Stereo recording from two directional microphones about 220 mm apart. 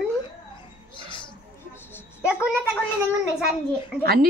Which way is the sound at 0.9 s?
20° left (ahead or behind).